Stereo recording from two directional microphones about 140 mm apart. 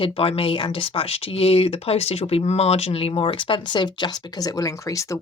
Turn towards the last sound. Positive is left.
turn(degrees=25)  # may be behind; listen again after turning